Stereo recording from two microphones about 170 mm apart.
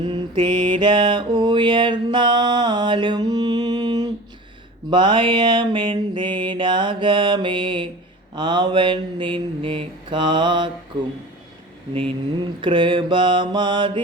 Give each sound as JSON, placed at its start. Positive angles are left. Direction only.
{"t": 0.0, "sound": "mantra", "side_deg": -30}
{"t": 12.6, "sound": "mantra", "side_deg": -30}